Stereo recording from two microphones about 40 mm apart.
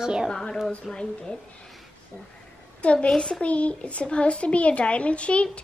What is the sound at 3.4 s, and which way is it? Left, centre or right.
A child's voice, left.